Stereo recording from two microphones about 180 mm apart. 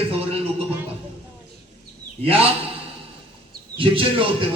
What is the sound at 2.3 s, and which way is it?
Speech, 30° right (ahead or behind).